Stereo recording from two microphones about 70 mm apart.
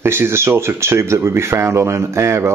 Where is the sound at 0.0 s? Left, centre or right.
Right.